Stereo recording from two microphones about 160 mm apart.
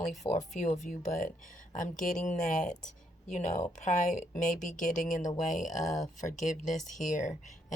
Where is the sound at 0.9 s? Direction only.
55° left (ahead or behind).